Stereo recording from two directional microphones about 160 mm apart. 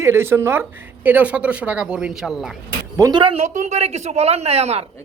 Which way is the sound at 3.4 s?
45° right (ahead or behind).